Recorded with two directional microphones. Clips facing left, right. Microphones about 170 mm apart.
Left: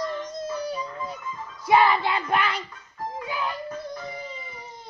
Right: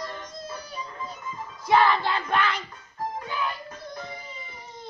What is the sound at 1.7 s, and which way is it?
Child singing, 10° left (ahead or behind).